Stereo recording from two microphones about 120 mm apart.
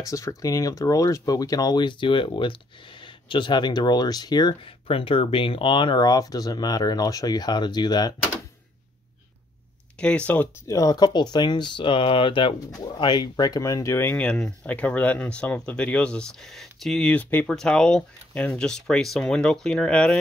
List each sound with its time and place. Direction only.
0.0 s speech: 25° left (ahead or behind)
4.8 s speech: 50° left (ahead or behind)
9.9 s speech: 10° left (ahead or behind)
10.7 s speech: 30° left (ahead or behind); by 20.2 s 10° left (ahead or behind)